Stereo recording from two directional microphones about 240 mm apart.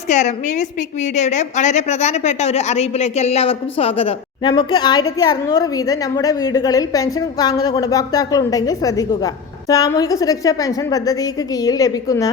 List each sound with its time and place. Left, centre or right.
0.1 s a woman's voice: left; by 12.3 s centre